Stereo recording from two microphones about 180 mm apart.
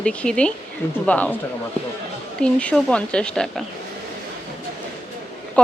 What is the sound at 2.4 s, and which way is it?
Speech, 5° left (ahead or behind).